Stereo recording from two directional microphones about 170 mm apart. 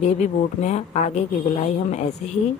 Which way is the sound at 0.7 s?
40° left (ahead or behind).